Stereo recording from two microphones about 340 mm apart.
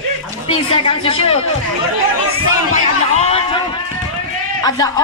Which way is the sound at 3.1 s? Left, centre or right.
Centre.